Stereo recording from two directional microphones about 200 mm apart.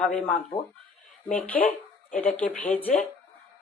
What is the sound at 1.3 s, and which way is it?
Speech, 5° left (ahead or behind).